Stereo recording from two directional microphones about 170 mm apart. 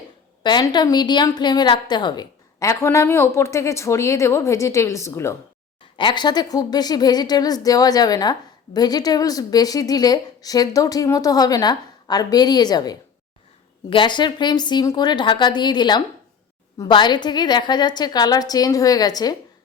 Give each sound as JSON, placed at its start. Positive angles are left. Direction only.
{"t": 0.4, "sound": "a woman's voice", "side_deg": 25}
{"t": 6.0, "sound": "a woman's voice", "side_deg": 25}